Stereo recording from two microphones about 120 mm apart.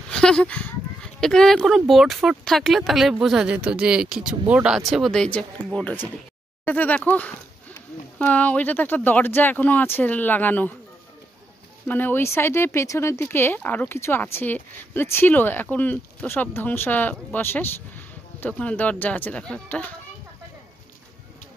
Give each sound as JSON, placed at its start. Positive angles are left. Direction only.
{"t": 0.1, "sound": "speech", "side_deg": 5}
{"t": 4.9, "sound": "speech", "side_deg": 5}
{"t": 11.9, "sound": "speech", "side_deg": 15}